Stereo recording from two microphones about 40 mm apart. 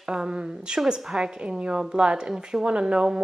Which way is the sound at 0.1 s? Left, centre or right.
Right.